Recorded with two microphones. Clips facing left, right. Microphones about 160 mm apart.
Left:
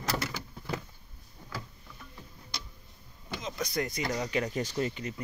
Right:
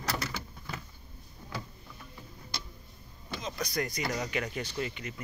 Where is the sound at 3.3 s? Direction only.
20° left (ahead or behind); by 5.1 s 40° left (ahead or behind).